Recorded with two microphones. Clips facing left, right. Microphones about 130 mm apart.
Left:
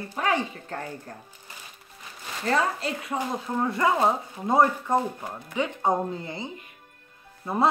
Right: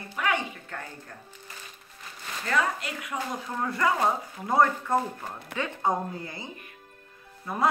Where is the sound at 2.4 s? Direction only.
30° left (ahead or behind).